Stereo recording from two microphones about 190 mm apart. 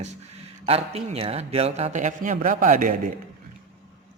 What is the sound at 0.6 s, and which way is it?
A man's voice, 30° right (ahead or behind).